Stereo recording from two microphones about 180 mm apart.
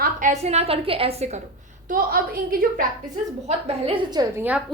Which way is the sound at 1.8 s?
55° right (ahead or behind).